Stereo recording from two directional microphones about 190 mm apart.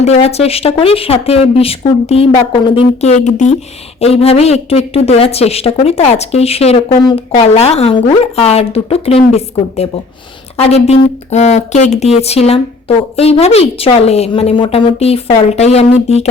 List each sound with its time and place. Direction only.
0.0 s a woman's voice: 35° left (ahead or behind)